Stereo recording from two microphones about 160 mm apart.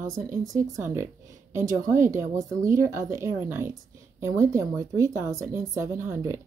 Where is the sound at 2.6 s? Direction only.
20° right (ahead or behind).